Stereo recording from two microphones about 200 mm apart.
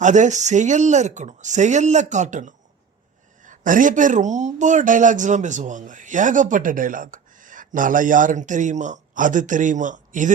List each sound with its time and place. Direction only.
0.0 s speech: 40° right (ahead or behind)